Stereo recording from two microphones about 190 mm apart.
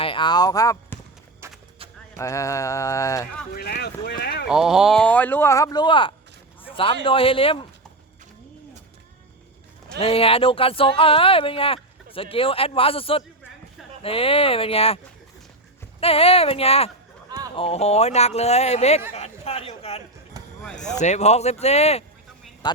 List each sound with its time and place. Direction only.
0.0 s speech: 25° left (ahead or behind)
2.1 s speech: 15° left (ahead or behind)
3.5 s speech: 55° left (ahead or behind)
4.4 s speech: 5° right (ahead or behind); by 6.1 s 25° left (ahead or behind)
6.6 s a sound: 30° left (ahead or behind)
7.0 s speech: 30° left (ahead or behind)
10.0 s speech: 30° left (ahead or behind)
16.0 s a man's voice: 30° left (ahead or behind)
20.4 s basketball bounce: 20° right (ahead or behind)
21.0 s speech: 35° left (ahead or behind)